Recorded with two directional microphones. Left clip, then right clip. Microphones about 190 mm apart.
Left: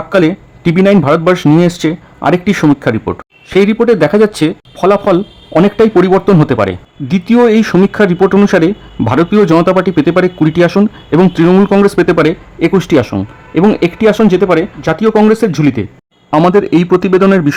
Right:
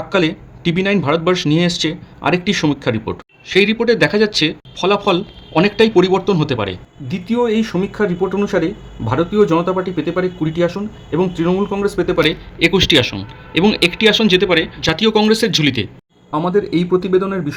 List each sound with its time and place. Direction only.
0.1 s speech: 35° left (ahead or behind)